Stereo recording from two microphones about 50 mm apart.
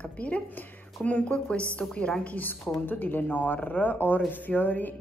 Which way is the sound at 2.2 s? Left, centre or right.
Left.